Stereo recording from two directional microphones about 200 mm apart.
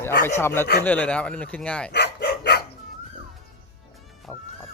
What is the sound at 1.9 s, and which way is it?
Dog, 55° left (ahead or behind).